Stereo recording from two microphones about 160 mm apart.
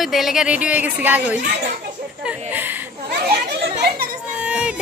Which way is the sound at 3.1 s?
80° right.